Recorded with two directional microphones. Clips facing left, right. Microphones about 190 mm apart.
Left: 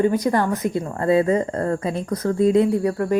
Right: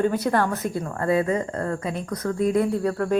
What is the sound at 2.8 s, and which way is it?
Speech, 10° left (ahead or behind).